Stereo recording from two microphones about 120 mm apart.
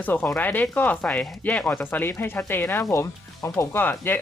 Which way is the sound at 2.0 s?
20° left (ahead or behind).